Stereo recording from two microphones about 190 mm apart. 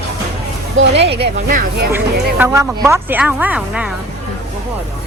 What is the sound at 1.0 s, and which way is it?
Speech, 65° right (ahead or behind).